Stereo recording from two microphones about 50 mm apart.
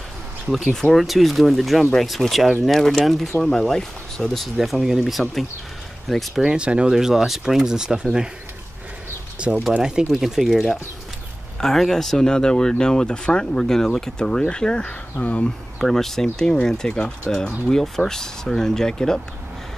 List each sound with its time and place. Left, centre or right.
0.9 s speech: centre
6.4 s speech: centre
9.4 s speech: right
11.6 s speech: centre; by 15.5 s left
15.8 s speech: centre